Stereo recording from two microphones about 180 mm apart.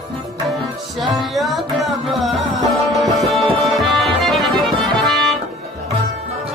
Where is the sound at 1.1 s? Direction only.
Centre (ahead or behind).